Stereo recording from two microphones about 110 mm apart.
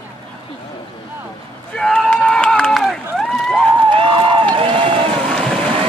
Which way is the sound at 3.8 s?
45° right (ahead or behind).